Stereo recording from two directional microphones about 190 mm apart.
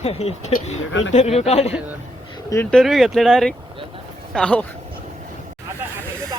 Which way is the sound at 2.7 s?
Centre (ahead or behind).